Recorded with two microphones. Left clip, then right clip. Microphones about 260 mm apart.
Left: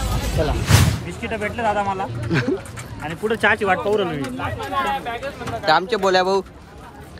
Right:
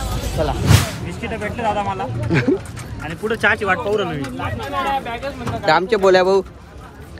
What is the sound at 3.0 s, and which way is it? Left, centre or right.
Speech, left.